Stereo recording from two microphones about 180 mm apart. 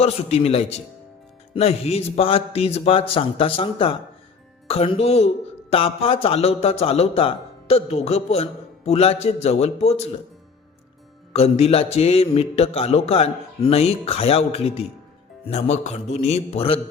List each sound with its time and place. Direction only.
0.0 s a man's voice: 35° left (ahead or behind)
11.3 s a man's voice: 35° left (ahead or behind)